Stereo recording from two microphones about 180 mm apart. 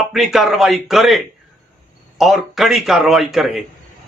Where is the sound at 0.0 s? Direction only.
Centre (ahead or behind).